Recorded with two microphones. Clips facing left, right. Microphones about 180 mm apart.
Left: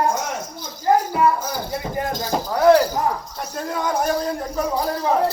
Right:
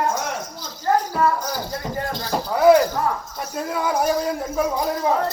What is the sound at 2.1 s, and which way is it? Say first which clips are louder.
Speech: left 2 dB; 45° left (ahead or behind).